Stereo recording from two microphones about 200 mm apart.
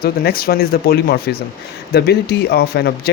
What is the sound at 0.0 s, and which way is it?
Speech, 50° left (ahead or behind).